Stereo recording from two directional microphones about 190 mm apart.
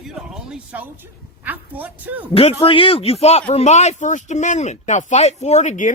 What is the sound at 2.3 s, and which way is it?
A man's voice, 30° left (ahead or behind).